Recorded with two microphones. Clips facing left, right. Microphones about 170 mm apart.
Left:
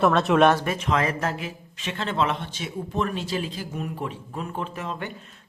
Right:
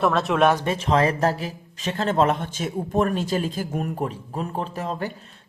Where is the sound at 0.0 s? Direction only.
Centre (ahead or behind).